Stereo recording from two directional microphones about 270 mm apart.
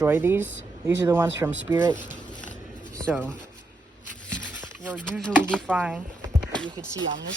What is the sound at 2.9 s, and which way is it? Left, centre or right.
Speech, centre.